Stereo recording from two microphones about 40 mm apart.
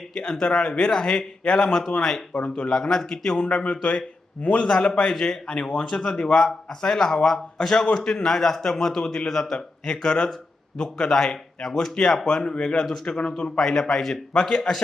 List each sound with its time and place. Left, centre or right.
0.1 s a man's voice: left
4.7 s a man's voice: centre
13.6 s a man's voice: centre